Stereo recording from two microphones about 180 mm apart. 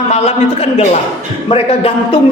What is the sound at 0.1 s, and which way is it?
A man's voice, 35° left (ahead or behind).